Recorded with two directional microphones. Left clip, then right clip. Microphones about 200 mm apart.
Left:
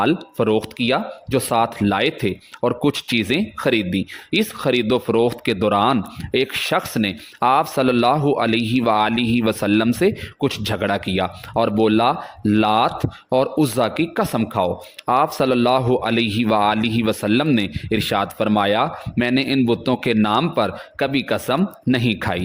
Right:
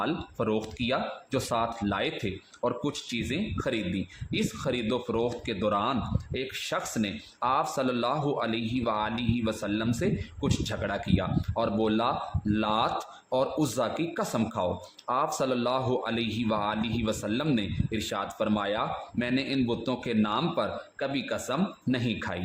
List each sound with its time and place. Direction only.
0.0 s speech: 45° left (ahead or behind)